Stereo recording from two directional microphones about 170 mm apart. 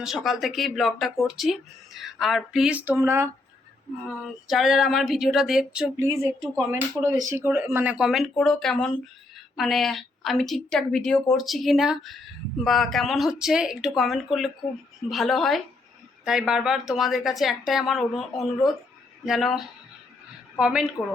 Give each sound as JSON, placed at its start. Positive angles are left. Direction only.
{"t": 0.0, "sound": "a woman's voice", "side_deg": 0}
{"t": 4.1, "sound": "a woman's voice", "side_deg": 0}
{"t": 6.6, "sound": "a woman's voice", "side_deg": -15}